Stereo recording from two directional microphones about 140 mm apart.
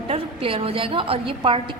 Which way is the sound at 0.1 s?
40° right (ahead or behind).